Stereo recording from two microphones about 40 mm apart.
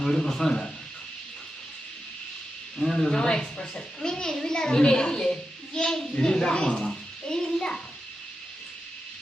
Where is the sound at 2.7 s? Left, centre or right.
Centre.